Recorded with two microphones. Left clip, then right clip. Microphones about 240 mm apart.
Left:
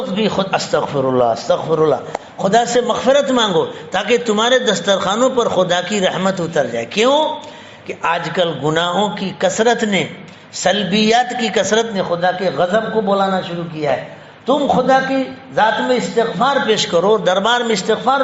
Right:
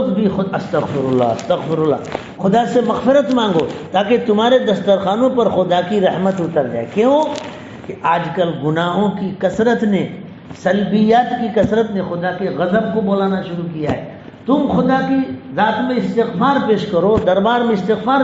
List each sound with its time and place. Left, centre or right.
0.2 s a man's voice: left
8.0 s a man's voice: left
14.4 s a man's voice: left